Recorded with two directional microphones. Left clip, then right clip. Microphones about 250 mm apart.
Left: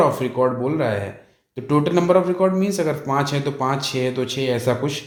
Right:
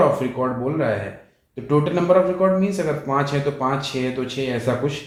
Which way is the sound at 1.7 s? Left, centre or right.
Left.